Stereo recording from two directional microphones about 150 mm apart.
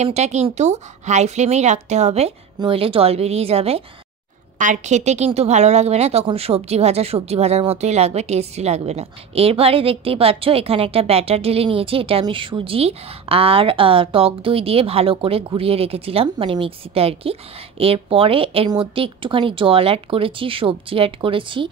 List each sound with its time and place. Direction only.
0.0 s a woman's voice: 45° right (ahead or behind)
4.6 s a woman's voice: 55° right (ahead or behind); by 21.6 s 35° right (ahead or behind)